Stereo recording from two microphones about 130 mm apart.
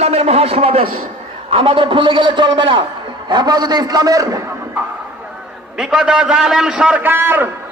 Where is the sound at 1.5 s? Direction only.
45° right (ahead or behind); by 4.4 s 25° right (ahead or behind).